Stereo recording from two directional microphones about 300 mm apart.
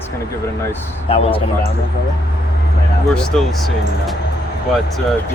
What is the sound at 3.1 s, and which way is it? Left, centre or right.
Speech, centre.